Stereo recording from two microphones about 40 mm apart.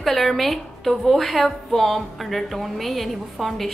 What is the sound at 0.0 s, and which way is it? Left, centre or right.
Speech, centre.